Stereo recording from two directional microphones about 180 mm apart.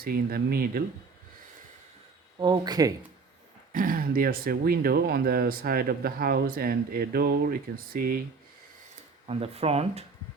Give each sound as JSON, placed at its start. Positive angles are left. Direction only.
{"t": 0.0, "sound": "speech", "side_deg": -55}
{"t": 2.4, "sound": "speech", "side_deg": -20}
{"t": 3.7, "sound": "speech", "side_deg": -50}
{"t": 9.2, "sound": "speech", "side_deg": -35}